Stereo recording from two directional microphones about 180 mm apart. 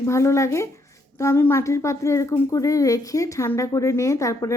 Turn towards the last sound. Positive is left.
turn(degrees=15)  # may be behind; listen again after turning